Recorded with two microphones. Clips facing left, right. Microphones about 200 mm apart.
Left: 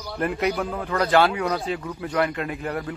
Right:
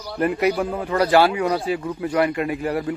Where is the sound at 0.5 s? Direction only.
10° right (ahead or behind).